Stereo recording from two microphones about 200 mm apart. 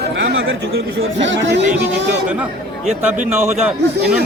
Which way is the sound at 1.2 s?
60° right (ahead or behind).